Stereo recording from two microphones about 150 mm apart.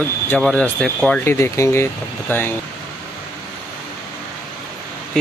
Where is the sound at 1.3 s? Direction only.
20° left (ahead or behind).